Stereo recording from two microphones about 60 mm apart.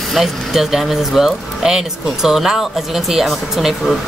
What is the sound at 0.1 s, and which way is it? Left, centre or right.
Speech, centre.